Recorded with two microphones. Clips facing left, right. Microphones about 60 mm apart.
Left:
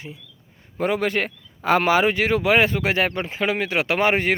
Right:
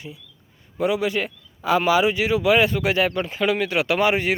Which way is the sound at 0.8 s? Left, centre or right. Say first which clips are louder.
Even; left.